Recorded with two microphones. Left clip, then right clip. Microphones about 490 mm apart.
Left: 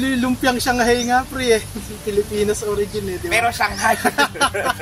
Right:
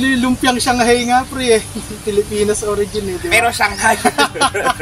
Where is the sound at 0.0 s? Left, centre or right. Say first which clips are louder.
Right 4 dB; left.